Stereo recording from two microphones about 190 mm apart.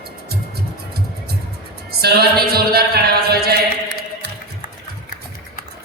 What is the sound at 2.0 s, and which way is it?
Music, 55° right (ahead or behind).